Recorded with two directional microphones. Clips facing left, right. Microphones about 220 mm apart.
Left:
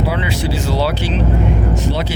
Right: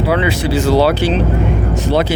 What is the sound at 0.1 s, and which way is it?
Speech, 55° right (ahead or behind).